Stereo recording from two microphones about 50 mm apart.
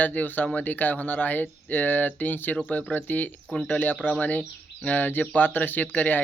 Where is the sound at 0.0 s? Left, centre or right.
Left.